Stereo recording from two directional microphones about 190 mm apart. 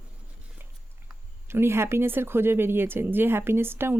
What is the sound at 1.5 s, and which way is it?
Speech, 15° right (ahead or behind).